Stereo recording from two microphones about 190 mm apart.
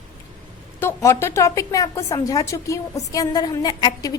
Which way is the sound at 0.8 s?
15° left (ahead or behind).